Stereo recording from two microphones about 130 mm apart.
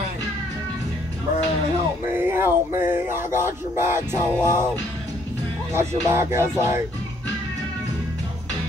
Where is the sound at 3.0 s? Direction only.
20° right (ahead or behind).